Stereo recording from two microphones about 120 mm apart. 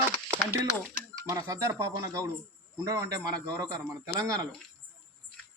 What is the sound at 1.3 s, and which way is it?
Speech, 25° right (ahead or behind).